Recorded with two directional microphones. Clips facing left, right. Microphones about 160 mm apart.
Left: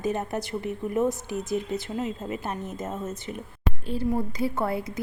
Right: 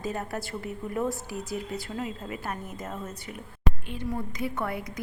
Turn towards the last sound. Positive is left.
turn(degrees=30)  # may be behind; listen again after turning